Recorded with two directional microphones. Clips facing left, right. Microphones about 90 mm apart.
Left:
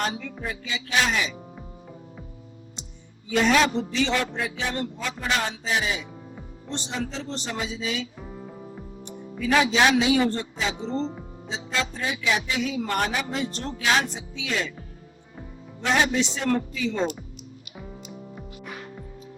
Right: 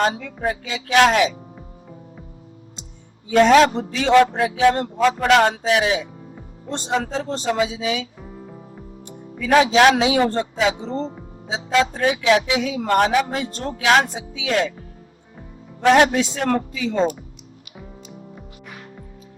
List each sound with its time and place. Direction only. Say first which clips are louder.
0.2 s speech: right 8 dB; 60° right (ahead or behind)
3.2 s a man's voice: right 8 dB; 55° right (ahead or behind)
4.4 s speech: right 11 dB; 65° right (ahead or behind)
4.9 s a man's voice: right 12 dB; 90° right; by 6.1 s 70° right (ahead or behind)
6.9 s a man's voice: right 10 dB; 55° right (ahead or behind)
7.5 s speech: right 8 dB; 70° right (ahead or behind)
8.2 s music: right 1 dB; centre (ahead or behind)
9.4 s speech: right 6 dB; 55° right (ahead or behind)
10.8 s a man's voice: right 2 dB; 45° right (ahead or behind)
11.5 s a man's voice: right 9 dB; 80° right; by 14.7 s 60° right (ahead or behind)
15.8 s speech: right 8 dB; 65° right (ahead or behind)
16.3 s a man's voice: right 4 dB; 50° right (ahead or behind)